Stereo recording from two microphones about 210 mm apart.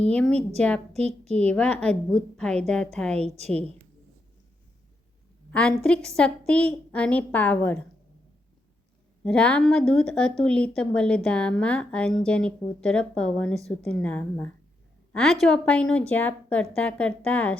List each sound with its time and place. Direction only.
0.0 s a woman's voice: 5° left (ahead or behind)
0.9 s a woman's voice: 30° right (ahead or behind)
1.4 s a woman's voice: 5° left (ahead or behind)
3.2 s a woman's voice: 30° right (ahead or behind)
5.5 s a woman's voice: 5° left (ahead or behind)
9.2 s a woman's voice: 5° left (ahead or behind)